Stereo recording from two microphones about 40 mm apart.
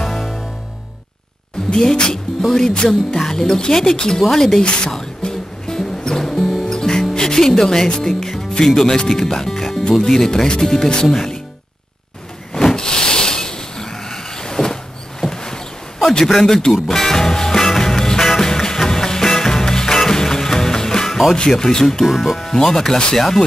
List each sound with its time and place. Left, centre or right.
0.0 s music: centre
1.7 s speech: centre
4.6 s speech: left
4.9 s music: centre
6.7 s music: centre
8.8 s speech: left
12.5 s vehicle: centre
16.0 s a man's voice: centre
16.8 s music: centre
21.4 s speech: centre
22.0 s speech: centre
22.4 s speech: centre
23.1 s speech: centre